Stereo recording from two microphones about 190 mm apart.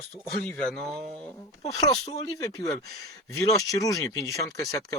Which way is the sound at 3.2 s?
15° left (ahead or behind).